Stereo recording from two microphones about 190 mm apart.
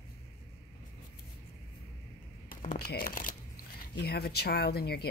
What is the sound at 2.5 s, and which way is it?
Speech, 45° left (ahead or behind).